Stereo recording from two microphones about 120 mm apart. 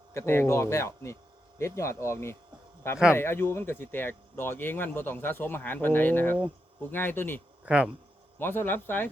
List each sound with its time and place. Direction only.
0.1 s speech: 20° left (ahead or behind)
7.6 s speech: 10° right (ahead or behind)
8.4 s speech: 20° left (ahead or behind)